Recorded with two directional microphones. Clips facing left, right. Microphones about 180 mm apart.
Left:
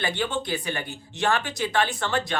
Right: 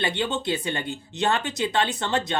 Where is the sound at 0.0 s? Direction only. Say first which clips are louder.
Right 1 dB; 20° right (ahead or behind).